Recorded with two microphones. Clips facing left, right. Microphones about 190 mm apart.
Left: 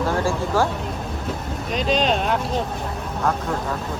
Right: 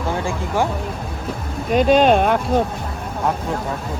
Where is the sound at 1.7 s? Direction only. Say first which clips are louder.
Right 8 dB; 55° right (ahead or behind).